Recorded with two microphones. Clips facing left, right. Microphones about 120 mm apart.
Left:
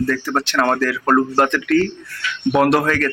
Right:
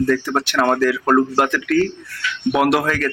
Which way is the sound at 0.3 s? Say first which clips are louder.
Left 2 dB; 10° right (ahead or behind).